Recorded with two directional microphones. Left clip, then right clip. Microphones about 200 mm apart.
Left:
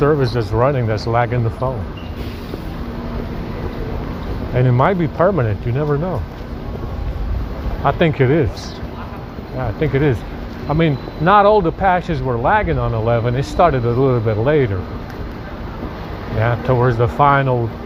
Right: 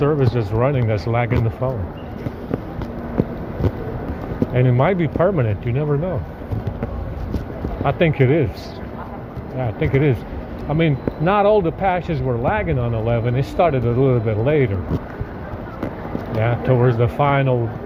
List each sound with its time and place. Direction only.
0.0 s speech: 40° right (ahead or behind)
4.5 s speech: 45° right (ahead or behind)
7.9 s speech: 40° right (ahead or behind)
9.6 s speech: 45° right (ahead or behind)
16.4 s speech: 40° right (ahead or behind)